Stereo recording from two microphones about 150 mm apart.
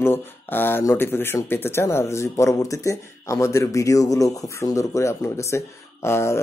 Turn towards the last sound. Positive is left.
turn(degrees=15)  # may be behind; listen again after turning